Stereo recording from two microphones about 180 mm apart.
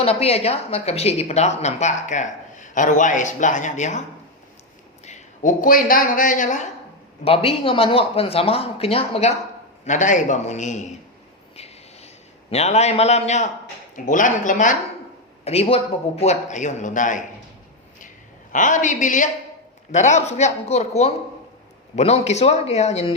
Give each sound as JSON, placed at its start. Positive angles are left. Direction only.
{"t": 0.0, "sound": "a woman's voice", "side_deg": 35}
{"t": 5.0, "sound": "a woman's voice", "side_deg": 45}
{"t": 7.3, "sound": "a woman's voice", "side_deg": 30}
{"t": 9.8, "sound": "a woman's voice", "side_deg": 45}
{"t": 11.5, "sound": "a sound", "side_deg": 35}
{"t": 13.9, "sound": "a man's voice", "side_deg": 45}
{"t": 15.4, "sound": "a woman's voice", "side_deg": 35}
{"t": 18.5, "sound": "a man's voice", "side_deg": 45}